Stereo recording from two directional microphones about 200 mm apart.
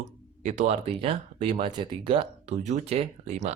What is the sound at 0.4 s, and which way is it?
Speech, 35° right (ahead or behind).